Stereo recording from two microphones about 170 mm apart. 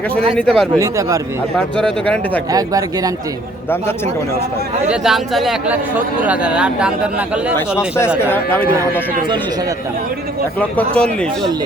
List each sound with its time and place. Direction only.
0.3 s speech: 5° left (ahead or behind)
0.8 s speech: 20° right (ahead or behind)
1.5 s speech: 5° left (ahead or behind)
2.5 s speech: 20° right (ahead or behind)
4.9 s speech: centre (ahead or behind)
8.2 s speech: 15° left (ahead or behind)
10.6 s speech: 10° left (ahead or behind)